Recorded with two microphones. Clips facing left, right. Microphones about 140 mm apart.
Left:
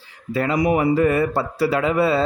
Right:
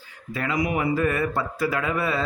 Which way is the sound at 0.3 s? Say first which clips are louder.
Left 6 dB; 35° left (ahead or behind).